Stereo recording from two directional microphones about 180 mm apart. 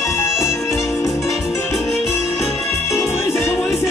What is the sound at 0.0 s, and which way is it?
Music, 15° left (ahead or behind).